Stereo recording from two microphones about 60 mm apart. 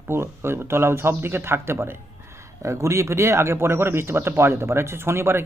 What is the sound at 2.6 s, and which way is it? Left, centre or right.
Speech, right.